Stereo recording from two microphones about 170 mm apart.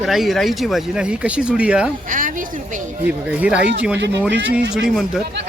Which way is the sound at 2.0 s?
50° right (ahead or behind).